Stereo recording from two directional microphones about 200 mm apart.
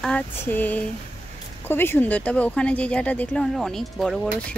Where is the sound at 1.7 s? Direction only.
10° left (ahead or behind).